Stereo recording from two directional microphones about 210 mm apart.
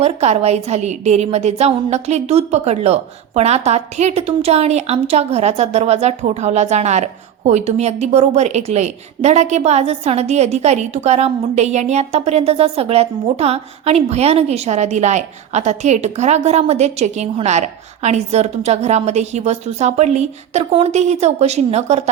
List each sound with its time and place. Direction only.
0.0 s a woman's voice: 30° right (ahead or behind)